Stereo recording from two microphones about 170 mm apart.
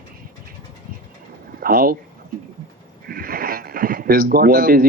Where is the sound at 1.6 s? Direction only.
60° right (ahead or behind).